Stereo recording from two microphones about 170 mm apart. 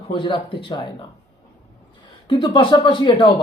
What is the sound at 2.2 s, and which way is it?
Speech, 30° left (ahead or behind).